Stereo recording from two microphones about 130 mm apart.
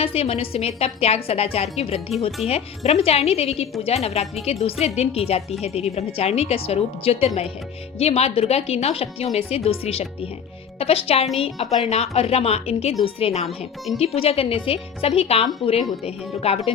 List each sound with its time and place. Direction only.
0.0 s speech: 50° left (ahead or behind)